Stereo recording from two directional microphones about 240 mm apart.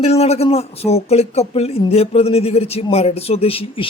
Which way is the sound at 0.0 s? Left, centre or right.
Left.